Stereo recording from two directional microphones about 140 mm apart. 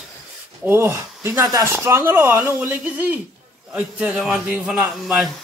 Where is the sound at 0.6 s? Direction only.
15° right (ahead or behind).